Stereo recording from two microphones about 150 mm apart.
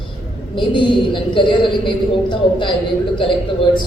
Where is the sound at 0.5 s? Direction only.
35° left (ahead or behind).